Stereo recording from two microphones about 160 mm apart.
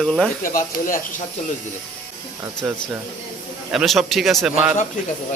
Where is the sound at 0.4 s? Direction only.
60° left (ahead or behind).